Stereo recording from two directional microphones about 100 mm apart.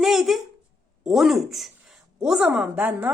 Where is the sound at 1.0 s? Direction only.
5° right (ahead or behind).